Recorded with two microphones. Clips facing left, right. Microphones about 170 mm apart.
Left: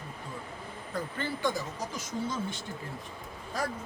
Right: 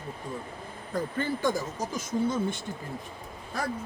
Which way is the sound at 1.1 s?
45° right (ahead or behind).